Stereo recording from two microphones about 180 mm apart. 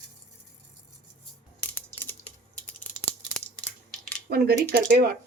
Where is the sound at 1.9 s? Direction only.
10° left (ahead or behind).